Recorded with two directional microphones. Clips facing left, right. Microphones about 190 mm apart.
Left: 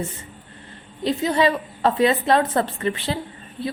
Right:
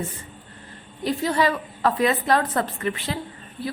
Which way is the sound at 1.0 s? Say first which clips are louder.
Left 2 dB; 25° left (ahead or behind).